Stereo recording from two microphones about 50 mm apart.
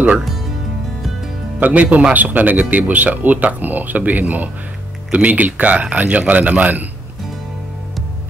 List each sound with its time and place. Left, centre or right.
1.6 s speech: right